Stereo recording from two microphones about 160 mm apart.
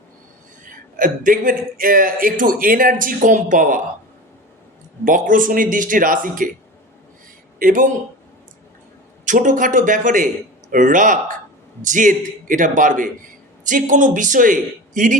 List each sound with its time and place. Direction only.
0.6 s speech: 55° right (ahead or behind)
5.0 s speech: 55° right (ahead or behind)
7.6 s speech: 55° right (ahead or behind)
9.2 s a man's voice: 50° right (ahead or behind)